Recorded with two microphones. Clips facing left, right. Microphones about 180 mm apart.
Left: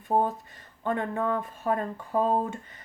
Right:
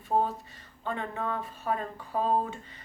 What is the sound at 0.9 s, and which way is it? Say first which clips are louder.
Speech: left 5 dB; 50° left (ahead or behind).